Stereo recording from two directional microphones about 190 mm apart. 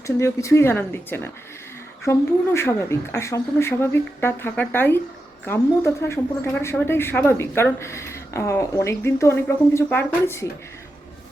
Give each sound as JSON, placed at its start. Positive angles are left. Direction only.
{"t": 0.2, "sound": "a woman's voice", "side_deg": 15}